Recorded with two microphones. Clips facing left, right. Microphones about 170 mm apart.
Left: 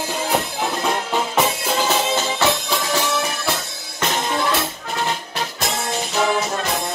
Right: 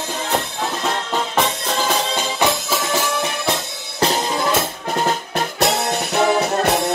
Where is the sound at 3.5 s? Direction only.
35° right (ahead or behind).